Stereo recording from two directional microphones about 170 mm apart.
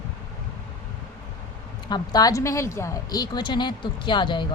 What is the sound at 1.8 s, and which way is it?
A woman's voice, 25° left (ahead or behind).